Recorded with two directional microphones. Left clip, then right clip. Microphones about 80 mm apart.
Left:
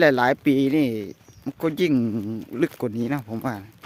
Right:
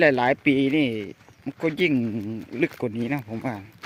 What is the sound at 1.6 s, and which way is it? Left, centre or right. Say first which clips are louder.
Speech: left 1 dB; left.